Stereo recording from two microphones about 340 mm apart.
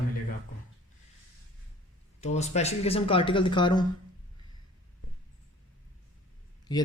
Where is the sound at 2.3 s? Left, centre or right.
Centre.